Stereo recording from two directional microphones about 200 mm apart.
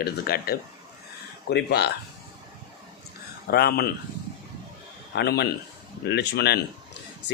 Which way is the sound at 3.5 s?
50° left (ahead or behind).